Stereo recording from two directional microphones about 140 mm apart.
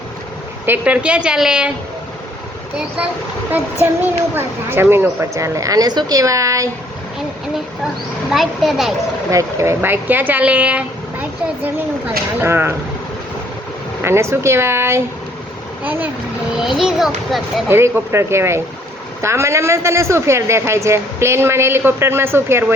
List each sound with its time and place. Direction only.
0.6 s speech: 10° right (ahead or behind)
4.0 s speech: 15° right (ahead or behind)
8.3 s a child's voice: centre (ahead or behind)
9.3 s speech: 20° right (ahead or behind)
14.0 s speech: 20° right (ahead or behind)
16.6 s a child's voice: centre (ahead or behind)
17.7 s speech: 15° right (ahead or behind)